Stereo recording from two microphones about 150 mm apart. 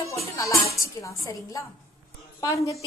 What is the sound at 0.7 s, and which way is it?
A woman's voice, 20° left (ahead or behind).